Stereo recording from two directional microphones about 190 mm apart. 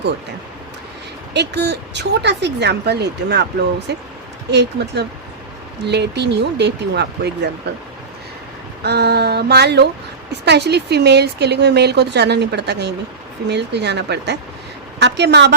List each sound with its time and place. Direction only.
1.3 s speech: 65° right (ahead or behind)
8.8 s speech: 60° right (ahead or behind)